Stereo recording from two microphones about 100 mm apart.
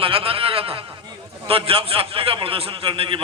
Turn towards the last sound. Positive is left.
turn(degrees=-65)  # may be behind; listen again after turning